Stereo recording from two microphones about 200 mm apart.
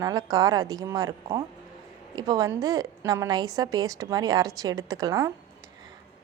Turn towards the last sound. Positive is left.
turn(degrees=-15)  # may be behind; listen again after turning